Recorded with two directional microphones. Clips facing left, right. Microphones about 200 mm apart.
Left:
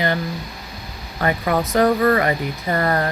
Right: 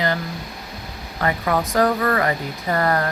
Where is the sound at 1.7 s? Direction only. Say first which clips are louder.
Left 4 dB; 25° left (ahead or behind).